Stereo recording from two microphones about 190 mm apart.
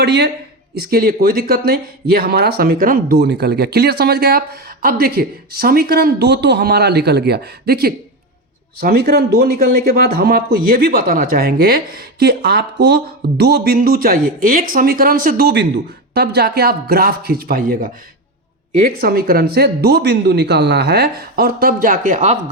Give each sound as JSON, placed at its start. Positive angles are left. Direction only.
{"t": 0.0, "sound": "speech", "side_deg": -60}